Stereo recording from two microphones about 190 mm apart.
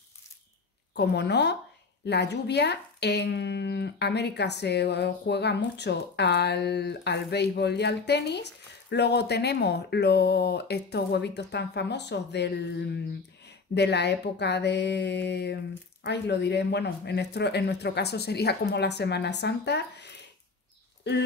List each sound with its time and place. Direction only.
0.9 s speech: 60° left (ahead or behind)